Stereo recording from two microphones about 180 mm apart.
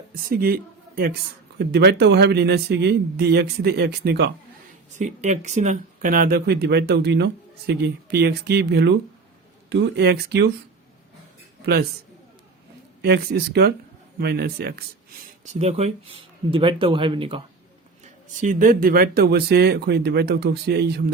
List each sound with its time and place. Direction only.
0.1 s a man's voice: 55° right (ahead or behind)
4.9 s a man's voice: 40° right (ahead or behind); by 10.5 s 65° right (ahead or behind)
11.6 s a man's voice: 60° right (ahead or behind)
13.0 s a man's voice: 65° right (ahead or behind)
15.5 s speech: 35° right (ahead or behind)
18.0 s a man's voice: 45° right (ahead or behind); by 21.0 s 65° right (ahead or behind)